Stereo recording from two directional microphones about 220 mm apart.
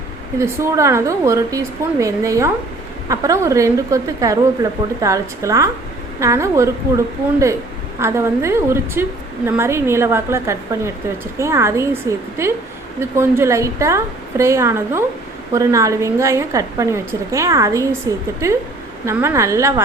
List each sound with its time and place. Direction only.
0.3 s a woman's voice: 15° right (ahead or behind)